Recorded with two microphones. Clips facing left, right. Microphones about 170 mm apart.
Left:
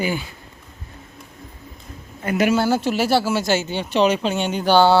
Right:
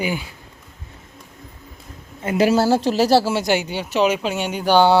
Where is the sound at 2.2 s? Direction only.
30° right (ahead or behind).